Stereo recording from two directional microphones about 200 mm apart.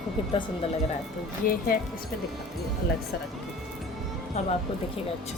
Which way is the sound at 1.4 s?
45° left (ahead or behind).